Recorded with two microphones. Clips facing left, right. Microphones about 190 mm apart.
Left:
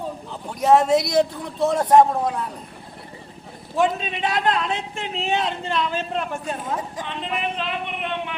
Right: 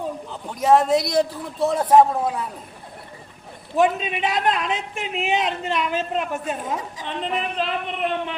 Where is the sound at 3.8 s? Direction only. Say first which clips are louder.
Right 2 dB; 20° right (ahead or behind).